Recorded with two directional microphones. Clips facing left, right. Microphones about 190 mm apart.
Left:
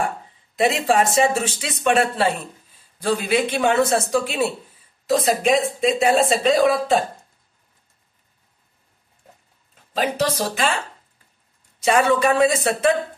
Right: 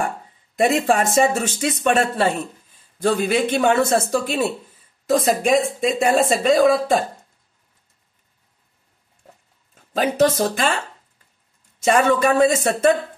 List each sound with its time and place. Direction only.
0.6 s speech: 50° right (ahead or behind)
9.9 s speech: 50° right (ahead or behind)
11.8 s speech: 45° right (ahead or behind)